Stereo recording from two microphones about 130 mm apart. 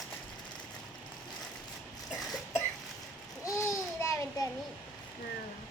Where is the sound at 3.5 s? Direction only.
25° left (ahead or behind).